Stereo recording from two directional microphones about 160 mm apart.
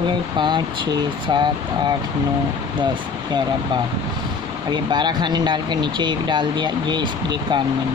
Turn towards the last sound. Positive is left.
turn(degrees=-30)  # may be behind; listen again after turning